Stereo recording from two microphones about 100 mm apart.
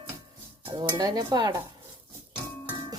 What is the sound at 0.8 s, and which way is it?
Speech, 40° right (ahead or behind).